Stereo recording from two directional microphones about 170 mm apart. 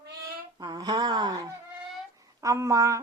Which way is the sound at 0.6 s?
25° right (ahead or behind).